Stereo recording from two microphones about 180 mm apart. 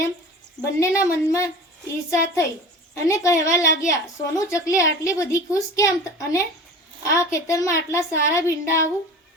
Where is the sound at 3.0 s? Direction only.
15° left (ahead or behind).